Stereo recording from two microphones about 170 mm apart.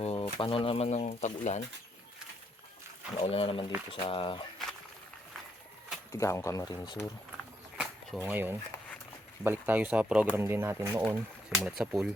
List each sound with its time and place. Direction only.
0.0 s speech: 35° left (ahead or behind)
3.2 s speech: 35° left (ahead or behind)
6.1 s speech: 15° left (ahead or behind)
7.8 s a sound: 10° right (ahead or behind)
9.4 s speech: 10° right (ahead or behind)
11.0 s speech: 5° right (ahead or behind)